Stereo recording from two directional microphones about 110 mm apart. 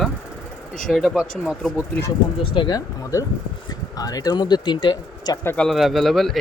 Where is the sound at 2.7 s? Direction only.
30° left (ahead or behind).